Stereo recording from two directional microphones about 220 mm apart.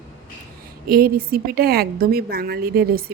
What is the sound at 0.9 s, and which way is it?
A woman's voice, 40° right (ahead or behind).